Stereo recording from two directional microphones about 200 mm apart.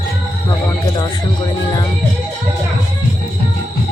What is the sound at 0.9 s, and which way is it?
Speech, 20° left (ahead or behind).